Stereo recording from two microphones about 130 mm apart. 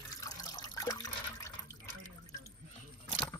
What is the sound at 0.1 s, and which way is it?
Drip, 25° left (ahead or behind).